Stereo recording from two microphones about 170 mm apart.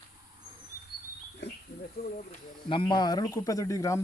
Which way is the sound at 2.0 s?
65° left (ahead or behind).